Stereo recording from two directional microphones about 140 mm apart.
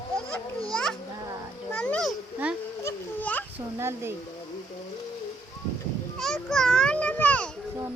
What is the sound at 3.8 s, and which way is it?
Speech, 20° right (ahead or behind).